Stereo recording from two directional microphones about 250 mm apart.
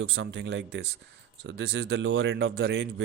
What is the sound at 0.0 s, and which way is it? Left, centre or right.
Speech, right.